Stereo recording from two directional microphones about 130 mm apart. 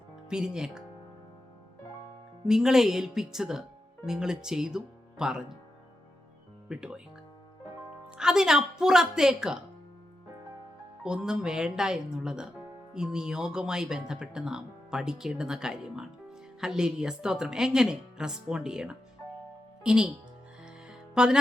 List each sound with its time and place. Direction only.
0.3 s speech: 5° right (ahead or behind)
2.5 s speech: 5° right (ahead or behind)
6.7 s speech: 5° right (ahead or behind)
8.1 s speech: 5° right (ahead or behind)
11.0 s speech: 5° right (ahead or behind)
21.2 s speech: 5° right (ahead or behind)